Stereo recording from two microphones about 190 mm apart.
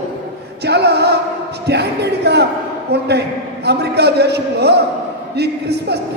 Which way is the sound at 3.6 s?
60° right (ahead or behind).